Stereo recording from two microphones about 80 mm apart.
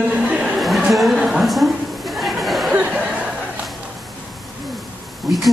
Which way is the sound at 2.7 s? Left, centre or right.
Centre.